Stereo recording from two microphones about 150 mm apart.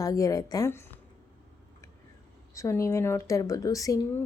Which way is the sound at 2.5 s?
20° left (ahead or behind).